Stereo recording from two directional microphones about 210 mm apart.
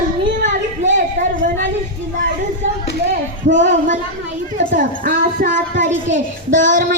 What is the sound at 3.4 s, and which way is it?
Child singing, 60° right (ahead or behind).